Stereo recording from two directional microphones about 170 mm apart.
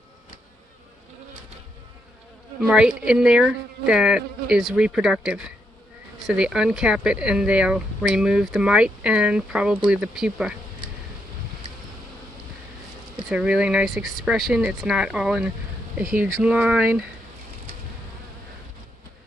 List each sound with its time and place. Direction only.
2.6 s speech: 5° right (ahead or behind)
13.1 s speech: 5° right (ahead or behind)